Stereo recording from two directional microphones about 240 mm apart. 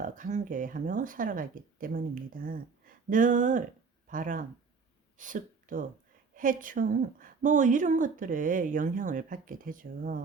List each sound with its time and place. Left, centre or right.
0.0 s a woman's voice: right